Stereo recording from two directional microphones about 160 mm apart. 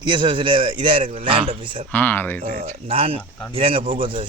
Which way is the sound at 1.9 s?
10° left (ahead or behind).